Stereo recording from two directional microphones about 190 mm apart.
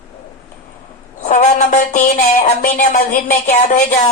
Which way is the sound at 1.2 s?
40° left (ahead or behind).